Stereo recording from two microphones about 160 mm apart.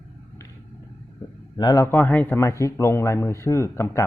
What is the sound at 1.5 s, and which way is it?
A man's voice, 25° left (ahead or behind).